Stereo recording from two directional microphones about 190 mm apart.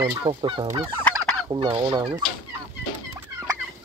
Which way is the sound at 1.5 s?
25° right (ahead or behind).